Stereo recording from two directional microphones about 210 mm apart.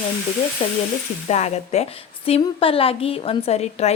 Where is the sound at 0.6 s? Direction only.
30° left (ahead or behind).